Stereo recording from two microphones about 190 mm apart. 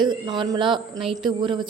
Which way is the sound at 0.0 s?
25° right (ahead or behind).